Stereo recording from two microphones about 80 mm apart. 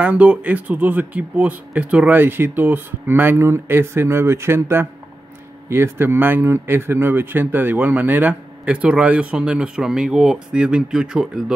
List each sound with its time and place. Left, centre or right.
0.0 s speech: centre